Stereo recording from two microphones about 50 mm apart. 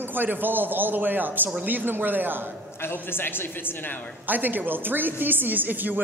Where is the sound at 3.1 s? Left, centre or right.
Left.